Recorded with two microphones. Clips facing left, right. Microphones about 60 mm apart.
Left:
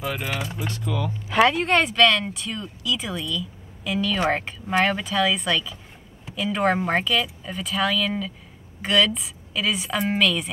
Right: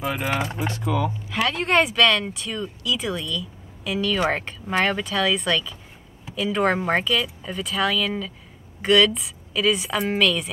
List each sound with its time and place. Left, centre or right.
0.0 s speech: centre
0.3 s speech: right
1.5 s speech: centre